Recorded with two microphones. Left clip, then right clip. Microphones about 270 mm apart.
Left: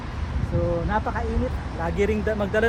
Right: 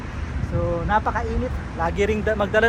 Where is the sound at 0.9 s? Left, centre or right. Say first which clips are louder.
Right 4 dB; centre.